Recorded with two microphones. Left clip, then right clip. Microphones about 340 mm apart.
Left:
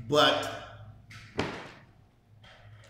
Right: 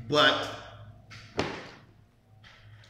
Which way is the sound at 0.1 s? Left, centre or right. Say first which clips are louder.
Right 1 dB; centre.